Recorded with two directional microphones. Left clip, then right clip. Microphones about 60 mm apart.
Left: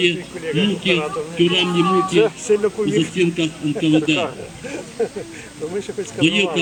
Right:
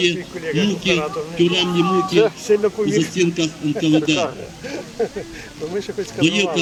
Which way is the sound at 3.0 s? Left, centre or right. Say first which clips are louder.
Even; right.